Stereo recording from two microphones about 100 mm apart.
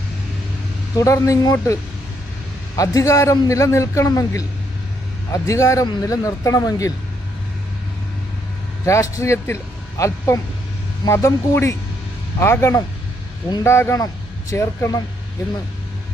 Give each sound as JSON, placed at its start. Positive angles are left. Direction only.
{"t": 0.9, "sound": "a man's voice", "side_deg": 30}
{"t": 8.8, "sound": "a man's voice", "side_deg": 30}